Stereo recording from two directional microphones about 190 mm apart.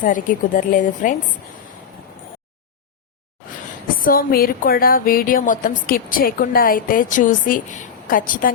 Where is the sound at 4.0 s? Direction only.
50° left (ahead or behind).